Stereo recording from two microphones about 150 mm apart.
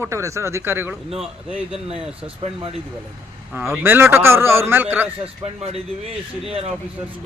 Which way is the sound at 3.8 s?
15° right (ahead or behind).